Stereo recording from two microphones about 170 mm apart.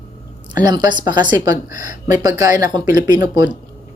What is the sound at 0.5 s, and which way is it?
Speech, 25° right (ahead or behind).